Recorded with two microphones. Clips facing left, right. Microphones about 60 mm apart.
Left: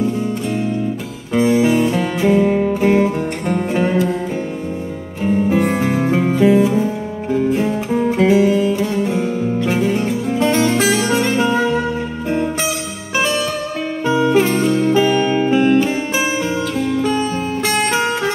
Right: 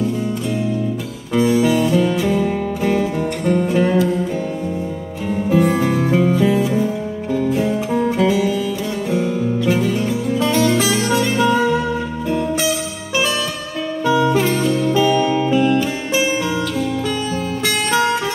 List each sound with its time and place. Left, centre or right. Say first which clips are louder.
1.3 s music: left 1 dB; left
5.5 s music: right 1 dB; left
8.2 s music: left 4 dB; left
10.4 s music: left 2 dB; left
14.0 s music: left 1 dB; left
17.6 s music: right 1 dB; left